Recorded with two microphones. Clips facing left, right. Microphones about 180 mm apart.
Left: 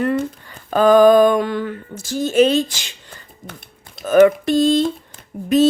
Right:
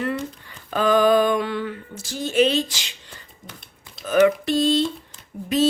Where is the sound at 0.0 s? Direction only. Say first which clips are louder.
Left 7 dB; 45° left (ahead or behind).